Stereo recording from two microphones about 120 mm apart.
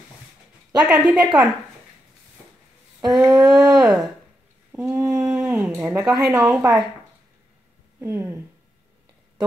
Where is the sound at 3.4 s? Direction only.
5° right (ahead or behind).